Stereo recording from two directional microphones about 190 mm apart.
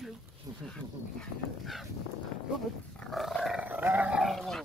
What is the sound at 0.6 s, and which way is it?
Livestock, 5° left (ahead or behind).